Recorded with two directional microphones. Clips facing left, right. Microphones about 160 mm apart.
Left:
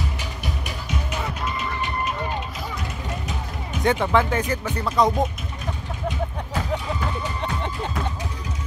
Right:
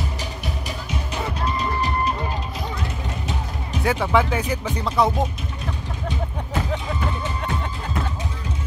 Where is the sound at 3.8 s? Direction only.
5° right (ahead or behind).